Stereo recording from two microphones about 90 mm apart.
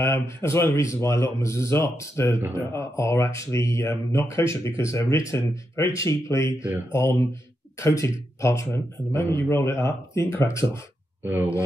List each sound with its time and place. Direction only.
0.0 s speech: 30° left (ahead or behind)
8.6 s speech: 20° left (ahead or behind)